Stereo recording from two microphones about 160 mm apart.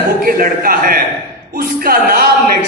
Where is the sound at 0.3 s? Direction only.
65° right (ahead or behind).